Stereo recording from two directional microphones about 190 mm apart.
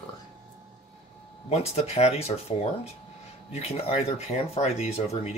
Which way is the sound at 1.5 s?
35° left (ahead or behind).